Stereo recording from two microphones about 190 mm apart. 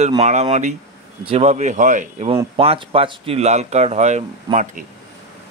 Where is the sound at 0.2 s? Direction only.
35° right (ahead or behind).